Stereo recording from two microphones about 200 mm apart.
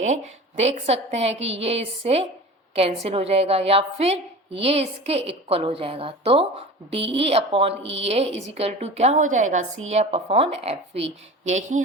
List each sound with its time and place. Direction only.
0.0 s a woman's voice: 35° right (ahead or behind)
7.8 s a woman's voice: 65° right (ahead or behind)
8.0 s a woman's voice: 30° right (ahead or behind)